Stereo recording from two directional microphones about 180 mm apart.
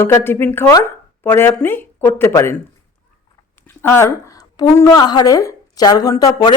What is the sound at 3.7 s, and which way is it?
A woman's voice, 10° left (ahead or behind).